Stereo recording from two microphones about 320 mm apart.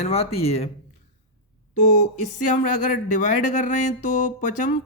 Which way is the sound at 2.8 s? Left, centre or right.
Left.